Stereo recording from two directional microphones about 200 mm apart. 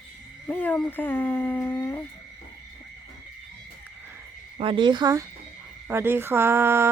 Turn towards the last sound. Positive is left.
turn(degrees=-10)  # may be behind; listen again after turning